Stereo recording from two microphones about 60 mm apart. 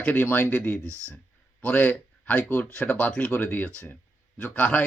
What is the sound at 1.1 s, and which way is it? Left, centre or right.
Speech, left.